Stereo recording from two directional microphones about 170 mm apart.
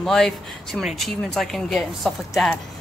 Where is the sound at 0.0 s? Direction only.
Centre (ahead or behind).